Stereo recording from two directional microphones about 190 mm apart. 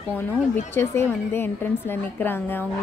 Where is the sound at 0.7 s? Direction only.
10° left (ahead or behind).